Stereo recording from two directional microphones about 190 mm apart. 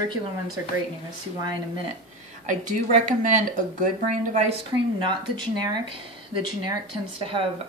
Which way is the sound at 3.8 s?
40° right (ahead or behind).